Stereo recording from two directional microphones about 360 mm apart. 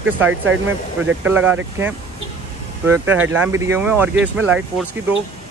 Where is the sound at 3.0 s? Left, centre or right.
Centre.